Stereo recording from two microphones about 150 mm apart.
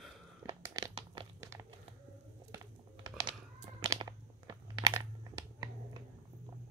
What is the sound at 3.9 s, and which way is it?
Crunch, 30° right (ahead or behind).